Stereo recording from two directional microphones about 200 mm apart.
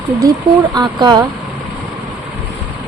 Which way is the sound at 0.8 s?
20° right (ahead or behind).